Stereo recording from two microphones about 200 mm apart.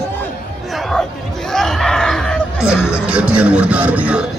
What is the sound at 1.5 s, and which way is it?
Music, centre (ahead or behind).